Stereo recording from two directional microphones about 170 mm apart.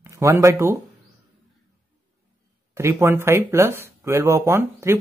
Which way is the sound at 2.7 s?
15° right (ahead or behind).